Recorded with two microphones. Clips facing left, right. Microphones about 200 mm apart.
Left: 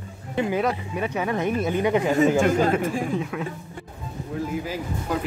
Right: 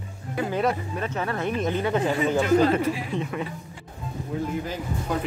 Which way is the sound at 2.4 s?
45° left (ahead or behind).